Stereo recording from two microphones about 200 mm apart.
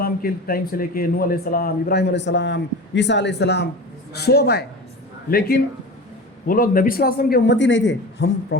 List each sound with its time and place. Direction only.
0.0 s a man's voice: 45° left (ahead or behind); by 8.5 s 65° left (ahead or behind)